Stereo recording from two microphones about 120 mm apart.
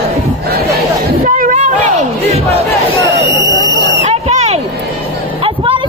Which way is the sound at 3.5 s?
30° left (ahead or behind).